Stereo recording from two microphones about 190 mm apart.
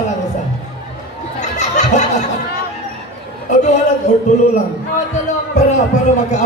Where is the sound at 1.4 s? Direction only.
40° left (ahead or behind).